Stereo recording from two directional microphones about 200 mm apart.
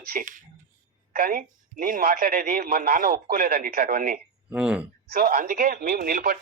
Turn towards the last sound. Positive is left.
turn(degrees=-45)  # may be behind; listen again after turning